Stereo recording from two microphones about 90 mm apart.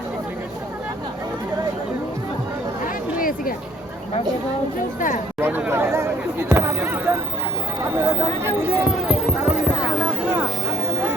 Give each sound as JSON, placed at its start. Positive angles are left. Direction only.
{"t": 5.4, "sound": "speech", "side_deg": -20}
{"t": 8.9, "sound": "music", "side_deg": -15}